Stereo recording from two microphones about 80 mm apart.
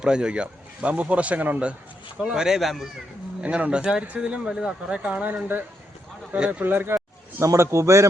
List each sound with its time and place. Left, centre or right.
0.0 s speech: centre
3.4 s speech: centre
6.9 s a man's voice: right